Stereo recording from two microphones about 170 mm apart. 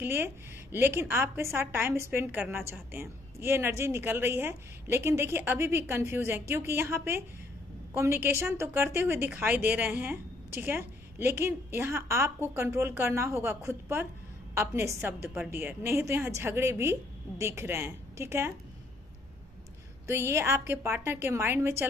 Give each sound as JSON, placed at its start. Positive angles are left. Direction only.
{"t": 0.0, "sound": "a woman's voice", "side_deg": -15}
{"t": 15.2, "sound": "a woman's voice", "side_deg": -5}
{"t": 15.5, "sound": "a woman's voice", "side_deg": -15}
{"t": 20.1, "sound": "a woman's voice", "side_deg": -15}